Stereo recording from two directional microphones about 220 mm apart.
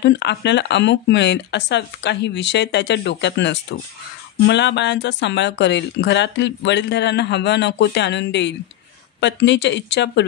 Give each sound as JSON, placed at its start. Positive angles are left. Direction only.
{"t": 0.0, "sound": "speech", "side_deg": 50}